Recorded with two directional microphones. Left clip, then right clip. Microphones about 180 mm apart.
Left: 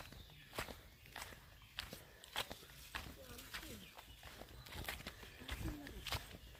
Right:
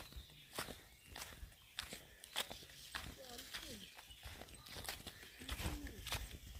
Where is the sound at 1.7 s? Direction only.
10° right (ahead or behind).